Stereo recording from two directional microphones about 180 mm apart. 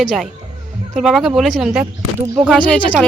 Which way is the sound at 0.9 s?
Centre (ahead or behind).